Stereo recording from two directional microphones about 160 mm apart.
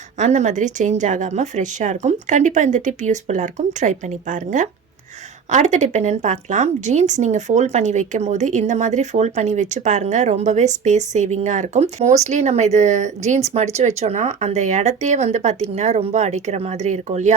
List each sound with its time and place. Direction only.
0.2 s speech: 50° right (ahead or behind)